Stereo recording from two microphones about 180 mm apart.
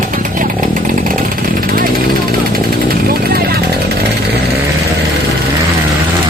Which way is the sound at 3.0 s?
60° right (ahead or behind).